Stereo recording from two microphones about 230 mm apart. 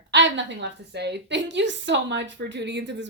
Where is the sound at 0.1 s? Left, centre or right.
Right.